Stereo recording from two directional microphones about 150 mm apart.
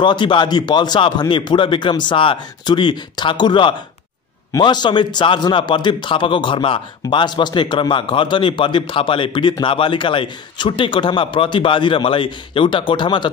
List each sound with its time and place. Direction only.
0.0 s a man's voice: 30° left (ahead or behind)